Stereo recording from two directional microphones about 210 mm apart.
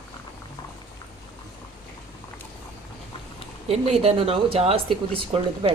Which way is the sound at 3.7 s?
30° right (ahead or behind).